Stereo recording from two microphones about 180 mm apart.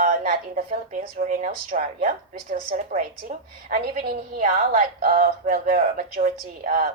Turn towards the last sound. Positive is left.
turn(degrees=-50)  # may be behind; listen again after turning